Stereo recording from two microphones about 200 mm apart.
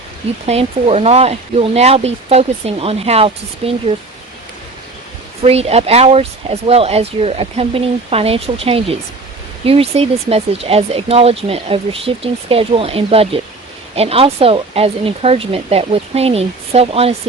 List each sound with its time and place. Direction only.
0.4 s speech: 30° right (ahead or behind)
5.4 s speech: 30° right (ahead or behind)